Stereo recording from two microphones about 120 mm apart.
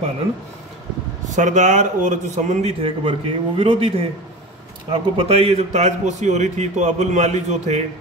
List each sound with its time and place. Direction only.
1.2 s speech: 90° right
2.8 s a man's voice: 50° right (ahead or behind); by 7.8 s 70° right (ahead or behind)